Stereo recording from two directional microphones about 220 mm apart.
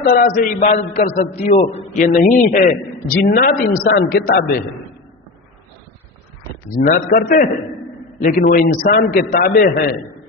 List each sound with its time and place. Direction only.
0.0 s a man's voice: 40° left (ahead or behind)
6.9 s a man's voice: 40° left (ahead or behind)